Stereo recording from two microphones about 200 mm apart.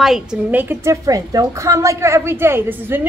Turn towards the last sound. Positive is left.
turn(degrees=-10)  # may be behind; listen again after turning